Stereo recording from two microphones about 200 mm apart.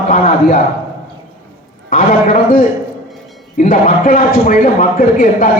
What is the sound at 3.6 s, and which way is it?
A man's voice, 45° left (ahead or behind).